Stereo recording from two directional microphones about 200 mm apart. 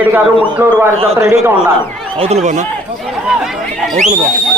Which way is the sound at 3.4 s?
Centre (ahead or behind).